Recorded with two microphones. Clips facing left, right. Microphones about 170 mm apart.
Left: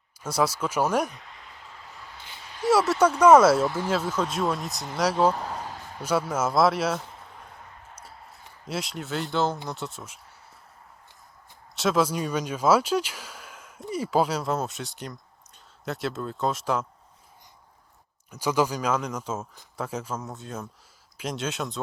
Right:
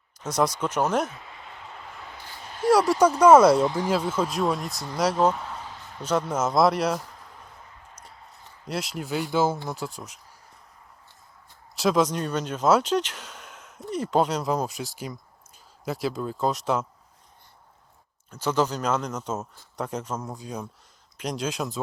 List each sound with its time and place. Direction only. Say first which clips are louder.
0.2 s speech: right 1 dB; 10° left (ahead or behind)
2.6 s a sound: right 2 dB; centre (ahead or behind)
3.0 s speech: right 1 dB; 10° right (ahead or behind)
3.4 s speech: right 2 dB; centre (ahead or behind)
3.7 s speech: right 2 dB; 15° right (ahead or behind)
4.1 s speech: right 2 dB; 5° right (ahead or behind)
4.7 s speech: even; 20° left (ahead or behind)
4.9 s speech: even; centre (ahead or behind)
5.3 s a sound: left 2 dB; 35° left (ahead or behind)
6.0 s speech: right 1 dB; 10° left (ahead or behind)
7.9 s a sound: left 1 dB; 5° left (ahead or behind)
9.6 s speech: right 2 dB; centre (ahead or behind)
11.7 s speech: right 1 dB; centre (ahead or behind)
18.3 s speech: even; 10° left (ahead or behind)